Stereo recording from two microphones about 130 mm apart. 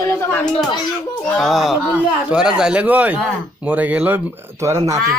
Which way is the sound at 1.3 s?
Centre (ahead or behind).